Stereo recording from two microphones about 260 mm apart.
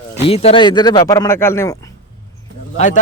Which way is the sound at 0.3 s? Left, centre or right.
Left.